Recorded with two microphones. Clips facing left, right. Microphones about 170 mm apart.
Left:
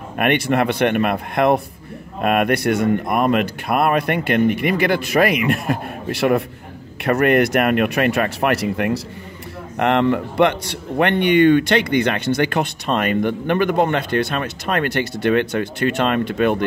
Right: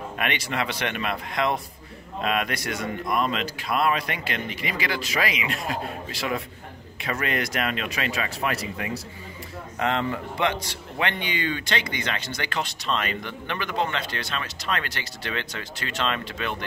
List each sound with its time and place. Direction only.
0.2 s speech: 55° left (ahead or behind)